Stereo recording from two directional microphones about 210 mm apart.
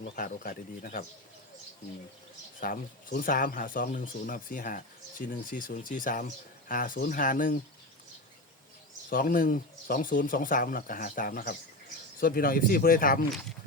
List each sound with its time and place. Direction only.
0.2 s speech: 40° left (ahead or behind)
2.6 s speech: 40° left (ahead or behind)
9.0 s speech: 40° left (ahead or behind)